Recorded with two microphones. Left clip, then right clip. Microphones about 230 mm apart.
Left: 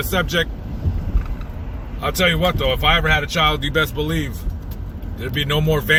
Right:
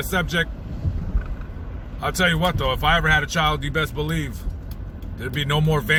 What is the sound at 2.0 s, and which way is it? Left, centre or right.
Speech, right.